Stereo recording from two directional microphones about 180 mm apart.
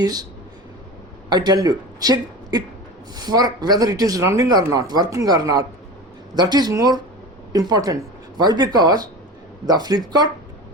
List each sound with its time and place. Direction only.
0.0 s speech: 20° right (ahead or behind)
1.3 s speech: 20° right (ahead or behind)